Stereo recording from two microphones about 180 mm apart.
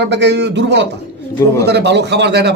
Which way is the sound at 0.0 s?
75° right (ahead or behind).